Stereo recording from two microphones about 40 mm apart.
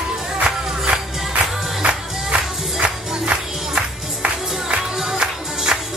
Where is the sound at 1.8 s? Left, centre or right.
Right.